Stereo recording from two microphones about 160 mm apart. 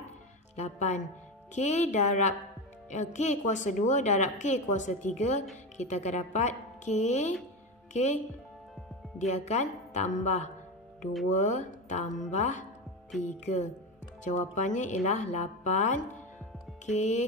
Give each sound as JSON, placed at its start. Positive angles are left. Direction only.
{"t": 0.6, "sound": "a woman's voice", "side_deg": 45}
{"t": 9.2, "sound": "a woman's voice", "side_deg": 45}